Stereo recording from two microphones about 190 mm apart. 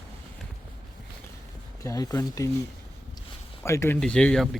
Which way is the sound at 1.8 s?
20° left (ahead or behind).